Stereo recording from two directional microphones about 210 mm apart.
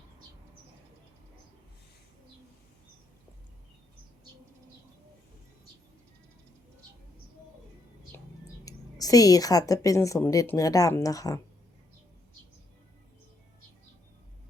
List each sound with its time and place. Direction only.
8.6 s a woman's voice: 15° left (ahead or behind)